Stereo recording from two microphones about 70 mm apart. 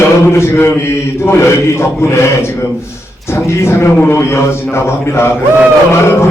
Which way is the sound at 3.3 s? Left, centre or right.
Left.